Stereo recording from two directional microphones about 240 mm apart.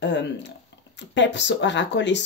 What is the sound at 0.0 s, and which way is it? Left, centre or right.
Speech, left.